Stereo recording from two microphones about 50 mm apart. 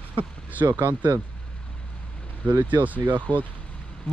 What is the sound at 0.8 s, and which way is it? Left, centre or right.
Speech, right.